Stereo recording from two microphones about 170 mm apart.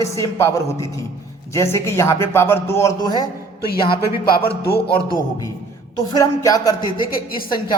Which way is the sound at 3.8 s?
30° left (ahead or behind).